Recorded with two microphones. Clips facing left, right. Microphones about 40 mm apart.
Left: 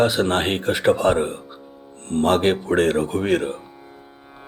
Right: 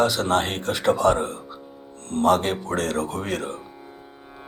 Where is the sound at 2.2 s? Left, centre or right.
Left.